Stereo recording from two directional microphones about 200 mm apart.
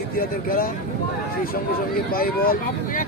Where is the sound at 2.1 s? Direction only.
45° left (ahead or behind).